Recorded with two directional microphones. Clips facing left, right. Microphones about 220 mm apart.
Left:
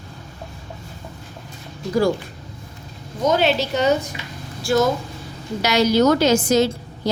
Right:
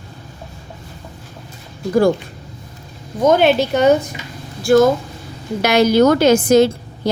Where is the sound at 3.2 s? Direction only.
55° right (ahead or behind).